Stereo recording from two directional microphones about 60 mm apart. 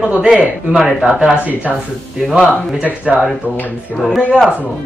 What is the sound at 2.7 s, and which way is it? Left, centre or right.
Speech, right.